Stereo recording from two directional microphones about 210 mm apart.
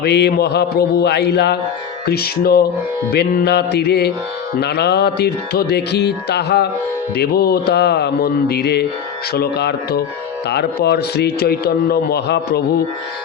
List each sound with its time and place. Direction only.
0.0 s a man's voice: 50° left (ahead or behind)